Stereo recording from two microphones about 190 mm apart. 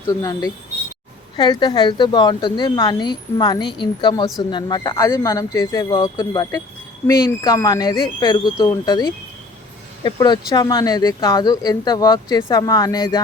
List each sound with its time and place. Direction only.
0.1 s speech: 20° left (ahead or behind)